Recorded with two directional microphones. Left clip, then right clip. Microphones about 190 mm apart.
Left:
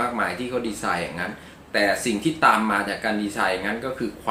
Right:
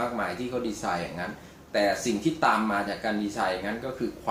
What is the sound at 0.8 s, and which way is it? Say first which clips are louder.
Speech: left 5 dB; centre (ahead or behind).